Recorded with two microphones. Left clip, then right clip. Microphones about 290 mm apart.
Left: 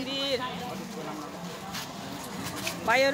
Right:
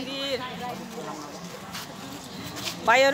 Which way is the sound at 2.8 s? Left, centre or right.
Right.